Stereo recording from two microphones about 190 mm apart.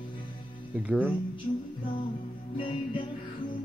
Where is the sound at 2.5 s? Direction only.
30° left (ahead or behind).